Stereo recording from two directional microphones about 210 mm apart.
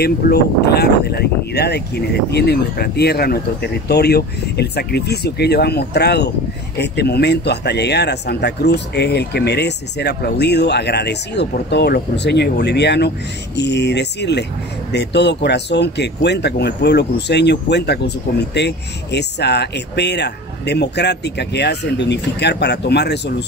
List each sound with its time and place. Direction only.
0.0 s speech: 50° left (ahead or behind)